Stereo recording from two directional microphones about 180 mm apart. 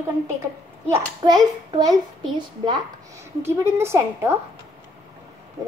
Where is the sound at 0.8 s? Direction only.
20° right (ahead or behind).